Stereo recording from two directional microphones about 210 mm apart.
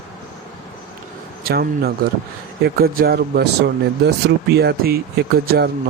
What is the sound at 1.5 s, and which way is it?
Speech, 45° right (ahead or behind).